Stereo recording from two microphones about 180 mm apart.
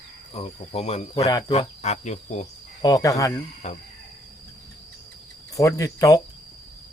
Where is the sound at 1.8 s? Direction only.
40° left (ahead or behind).